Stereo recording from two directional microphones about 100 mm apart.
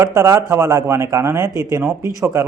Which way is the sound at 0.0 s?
30° right (ahead or behind).